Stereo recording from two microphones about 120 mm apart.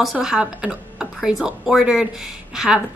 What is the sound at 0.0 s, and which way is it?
A woman's voice, 5° right (ahead or behind).